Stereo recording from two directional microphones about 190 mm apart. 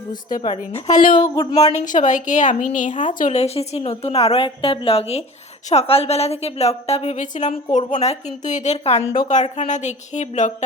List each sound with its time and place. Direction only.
0.4 s a woman's voice: 35° left (ahead or behind)
1.4 s speech: 20° left (ahead or behind)
1.7 s a woman's voice: 40° left (ahead or behind)